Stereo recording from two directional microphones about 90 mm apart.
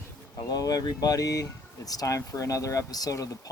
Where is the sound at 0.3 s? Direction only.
45° left (ahead or behind).